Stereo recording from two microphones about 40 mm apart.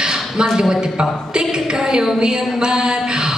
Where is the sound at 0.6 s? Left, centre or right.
Centre.